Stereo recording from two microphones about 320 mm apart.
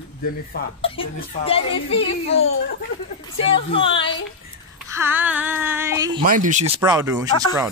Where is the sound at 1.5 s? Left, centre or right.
Centre.